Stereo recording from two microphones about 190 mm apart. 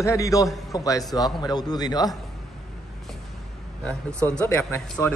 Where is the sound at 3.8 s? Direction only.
5° left (ahead or behind).